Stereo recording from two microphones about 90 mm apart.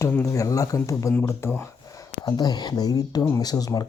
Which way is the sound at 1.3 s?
30° left (ahead or behind).